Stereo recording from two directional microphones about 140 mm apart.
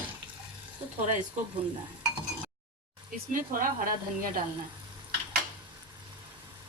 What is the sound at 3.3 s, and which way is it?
Speech, 75° right (ahead or behind).